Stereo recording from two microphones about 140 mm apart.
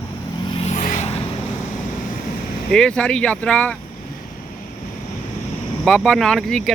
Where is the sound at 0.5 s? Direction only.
50° left (ahead or behind).